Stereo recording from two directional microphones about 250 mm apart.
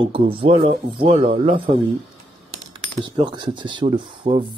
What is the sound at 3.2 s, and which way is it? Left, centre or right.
Speech, centre.